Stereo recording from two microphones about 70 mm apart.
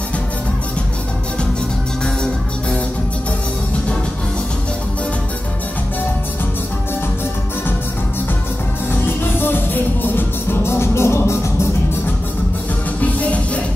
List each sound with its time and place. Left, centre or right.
9.0 s music: left